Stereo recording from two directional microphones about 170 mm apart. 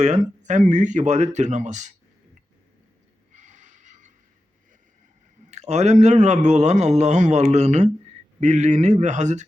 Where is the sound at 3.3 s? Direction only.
45° right (ahead or behind).